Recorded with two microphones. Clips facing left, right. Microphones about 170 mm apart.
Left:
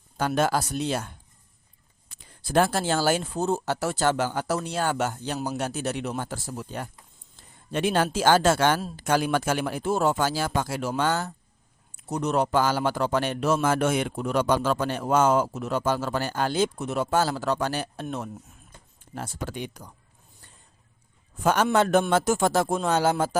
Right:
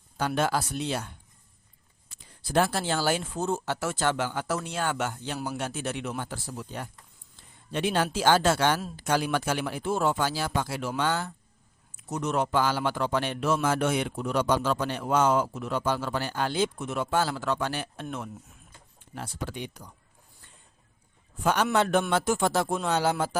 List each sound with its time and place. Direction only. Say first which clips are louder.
0.2 s a man's voice: left 3 dB; 45° left (ahead or behind)
2.4 s a man's voice: left 3 dB; 50° left (ahead or behind)
19.1 s a man's voice: left 2 dB; 45° left (ahead or behind)
21.4 s a man's voice: left 3 dB; 45° left (ahead or behind)